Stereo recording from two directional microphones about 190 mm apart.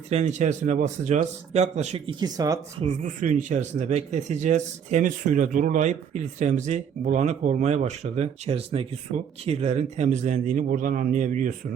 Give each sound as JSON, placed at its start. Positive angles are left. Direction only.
{"t": 0.1, "sound": "a man's voice", "side_deg": -35}
{"t": 2.2, "sound": "speech", "side_deg": -20}
{"t": 2.8, "sound": "a man's voice", "side_deg": -40}